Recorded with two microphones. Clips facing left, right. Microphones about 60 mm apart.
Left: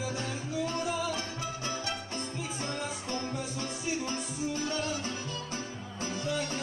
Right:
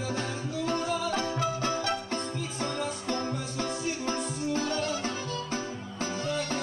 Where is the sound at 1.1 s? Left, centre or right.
Right.